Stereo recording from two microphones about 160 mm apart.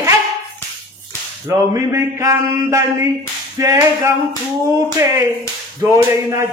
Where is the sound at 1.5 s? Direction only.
20° right (ahead or behind).